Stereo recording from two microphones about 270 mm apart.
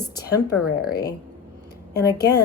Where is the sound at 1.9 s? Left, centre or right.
Centre.